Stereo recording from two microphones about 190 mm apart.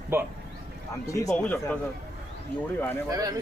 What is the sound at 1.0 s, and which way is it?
Speech, 15° left (ahead or behind).